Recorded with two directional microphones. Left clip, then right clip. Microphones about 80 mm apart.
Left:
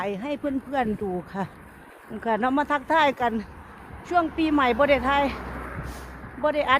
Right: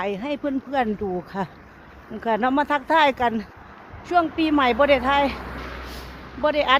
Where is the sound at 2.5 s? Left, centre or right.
Right.